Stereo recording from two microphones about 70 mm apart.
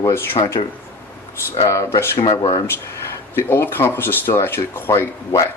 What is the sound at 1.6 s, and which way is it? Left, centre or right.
Speech, left.